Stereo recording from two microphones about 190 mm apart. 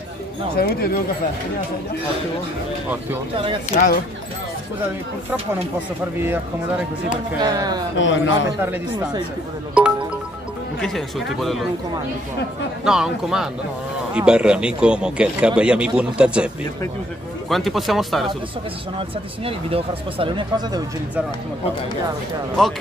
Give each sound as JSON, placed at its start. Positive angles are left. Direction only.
{"t": 0.6, "sound": "speech", "side_deg": 55}
{"t": 3.7, "sound": "speech", "side_deg": 45}
{"t": 7.3, "sound": "speech", "side_deg": -20}
{"t": 8.0, "sound": "a man's voice", "side_deg": 75}
{"t": 9.8, "sound": "a man's voice", "side_deg": -5}
{"t": 12.8, "sound": "a man's voice", "side_deg": -5}
{"t": 17.5, "sound": "a man's voice", "side_deg": 0}
{"t": 18.9, "sound": "speech", "side_deg": -30}
{"t": 22.6, "sound": "a man's voice", "side_deg": 5}